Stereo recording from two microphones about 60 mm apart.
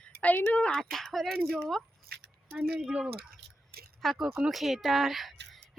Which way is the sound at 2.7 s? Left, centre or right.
Centre.